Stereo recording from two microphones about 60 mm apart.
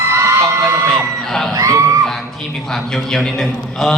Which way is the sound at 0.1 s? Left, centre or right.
Right.